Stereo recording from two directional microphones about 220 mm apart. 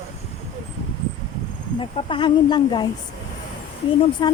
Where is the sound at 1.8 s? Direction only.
25° left (ahead or behind).